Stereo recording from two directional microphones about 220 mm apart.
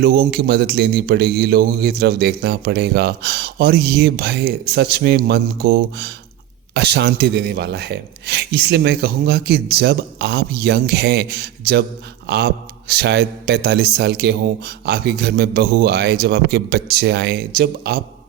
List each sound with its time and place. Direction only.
0.0 s a man's voice: 45° right (ahead or behind)